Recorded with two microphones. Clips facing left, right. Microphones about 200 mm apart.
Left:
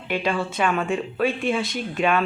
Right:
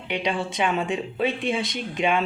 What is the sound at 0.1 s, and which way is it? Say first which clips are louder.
Speech: left 2 dB; 20° right (ahead or behind).